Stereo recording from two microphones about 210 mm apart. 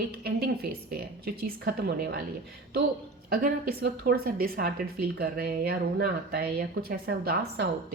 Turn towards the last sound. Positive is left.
turn(degrees=-50)  # may be behind; listen again after turning